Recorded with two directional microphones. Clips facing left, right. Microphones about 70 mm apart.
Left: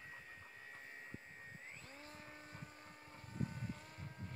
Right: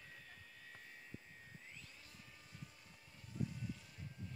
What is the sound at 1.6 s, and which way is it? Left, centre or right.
Vehicle, left.